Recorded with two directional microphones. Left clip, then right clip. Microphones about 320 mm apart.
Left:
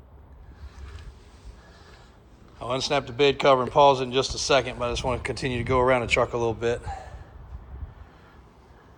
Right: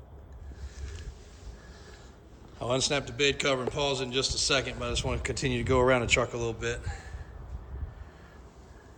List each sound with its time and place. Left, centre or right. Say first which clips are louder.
2.6 s a man's voice: left 3 dB; centre